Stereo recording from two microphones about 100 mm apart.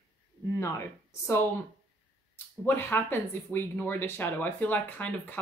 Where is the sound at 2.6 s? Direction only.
20° left (ahead or behind).